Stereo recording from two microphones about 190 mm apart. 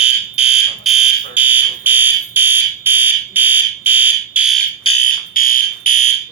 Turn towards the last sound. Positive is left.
turn(degrees=40)  # may be behind; listen again after turning